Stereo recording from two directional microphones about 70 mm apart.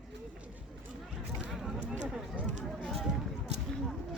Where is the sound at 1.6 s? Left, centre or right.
Centre.